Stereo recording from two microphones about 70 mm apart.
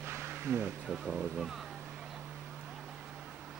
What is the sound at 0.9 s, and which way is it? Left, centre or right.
Speech, centre.